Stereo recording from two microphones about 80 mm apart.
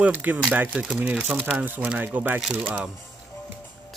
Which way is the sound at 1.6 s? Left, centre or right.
Right.